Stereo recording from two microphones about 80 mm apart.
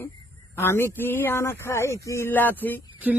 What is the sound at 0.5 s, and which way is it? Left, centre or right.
Speech, left.